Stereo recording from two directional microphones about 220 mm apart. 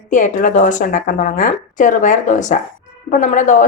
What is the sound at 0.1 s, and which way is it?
Speech, 35° left (ahead or behind).